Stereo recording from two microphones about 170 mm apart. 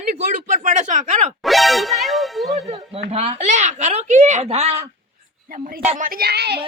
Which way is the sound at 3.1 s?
35° right (ahead or behind).